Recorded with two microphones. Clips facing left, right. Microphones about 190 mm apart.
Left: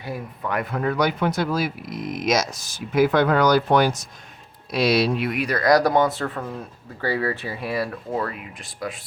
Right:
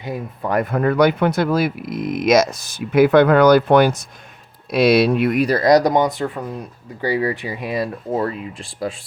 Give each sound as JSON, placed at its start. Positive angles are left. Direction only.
{"t": 0.4, "sound": "speech", "side_deg": -45}
{"t": 5.5, "sound": "speech", "side_deg": -25}